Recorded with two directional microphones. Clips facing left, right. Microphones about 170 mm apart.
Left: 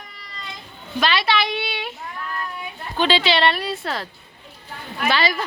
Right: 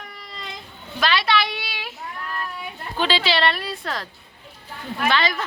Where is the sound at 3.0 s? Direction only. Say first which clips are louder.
Left 3 dB; centre (ahead or behind).